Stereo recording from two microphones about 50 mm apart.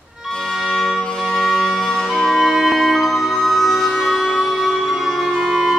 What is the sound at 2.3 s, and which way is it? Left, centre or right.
Music, centre.